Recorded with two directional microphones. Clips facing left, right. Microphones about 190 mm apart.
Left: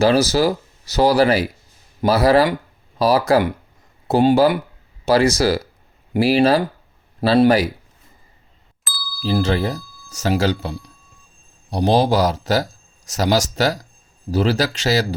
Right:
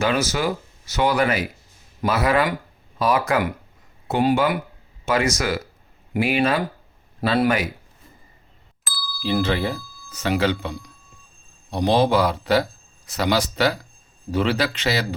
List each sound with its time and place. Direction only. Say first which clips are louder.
0.0 s speech: left 6 dB; 35° left (ahead or behind)
8.8 s ding: right 1 dB; centre (ahead or behind)
9.2 s speech: left 3 dB; 40° left (ahead or behind)